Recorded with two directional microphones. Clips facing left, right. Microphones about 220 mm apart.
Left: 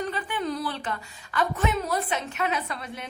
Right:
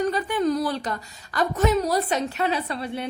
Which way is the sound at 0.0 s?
40° right (ahead or behind).